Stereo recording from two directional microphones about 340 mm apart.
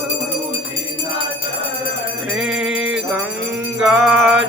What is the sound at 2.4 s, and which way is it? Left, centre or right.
Music, centre.